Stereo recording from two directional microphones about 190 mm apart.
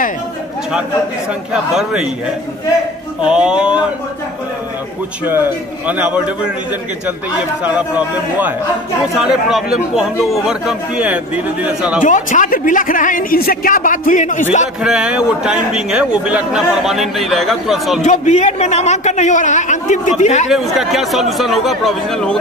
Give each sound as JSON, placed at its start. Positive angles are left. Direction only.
{"t": 1.5, "sound": "a man's voice", "side_deg": -5}
{"t": 3.3, "sound": "a man's voice", "side_deg": -5}
{"t": 5.9, "sound": "a man's voice", "side_deg": -10}
{"t": 12.0, "sound": "a man's voice", "side_deg": 40}
{"t": 14.8, "sound": "a man's voice", "side_deg": -5}
{"t": 18.0, "sound": "a man's voice", "side_deg": 40}
{"t": 20.4, "sound": "a man's voice", "side_deg": 0}